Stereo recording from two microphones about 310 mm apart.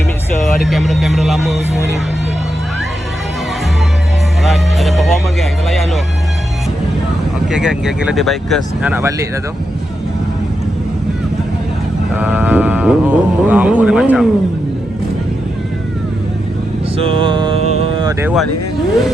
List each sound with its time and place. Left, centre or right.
0.4 s speech: centre
4.4 s speech: centre
7.5 s speech: centre
12.1 s a sound: centre
17.0 s speech: centre